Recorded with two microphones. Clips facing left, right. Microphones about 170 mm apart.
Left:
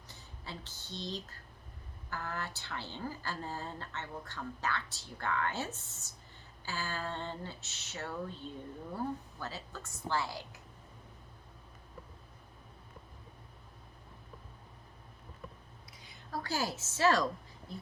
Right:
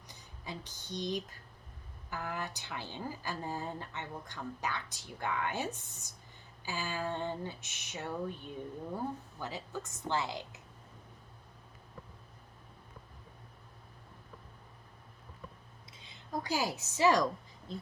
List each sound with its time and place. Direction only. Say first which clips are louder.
0.1 s a woman's voice: right 2 dB; 15° right (ahead or behind)
15.9 s a sound: right 2 dB; 25° right (ahead or behind)
17.7 s speech: right 3 dB; 20° right (ahead or behind)